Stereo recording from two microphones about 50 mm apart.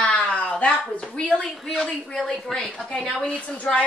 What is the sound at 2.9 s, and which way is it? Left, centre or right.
Speech, left.